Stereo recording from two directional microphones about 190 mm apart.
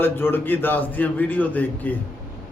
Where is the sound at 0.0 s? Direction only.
10° left (ahead or behind).